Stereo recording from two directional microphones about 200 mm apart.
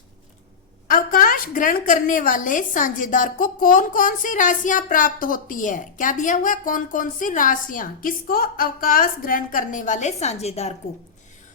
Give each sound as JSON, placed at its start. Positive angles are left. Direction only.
{"t": 0.9, "sound": "a woman's voice", "side_deg": 45}